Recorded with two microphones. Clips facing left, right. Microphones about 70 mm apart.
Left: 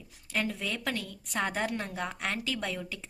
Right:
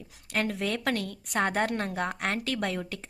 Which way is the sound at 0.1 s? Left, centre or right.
Right.